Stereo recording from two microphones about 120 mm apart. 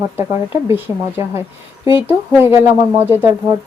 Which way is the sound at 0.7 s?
20° right (ahead or behind).